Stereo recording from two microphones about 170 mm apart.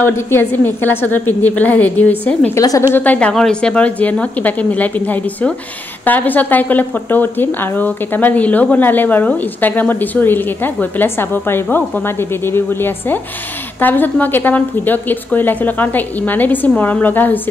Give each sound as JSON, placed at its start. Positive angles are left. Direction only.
{"t": 0.0, "sound": "a woman's voice", "side_deg": 15}
{"t": 2.5, "sound": "a woman's voice", "side_deg": 20}
{"t": 2.9, "sound": "a woman's voice", "side_deg": 10}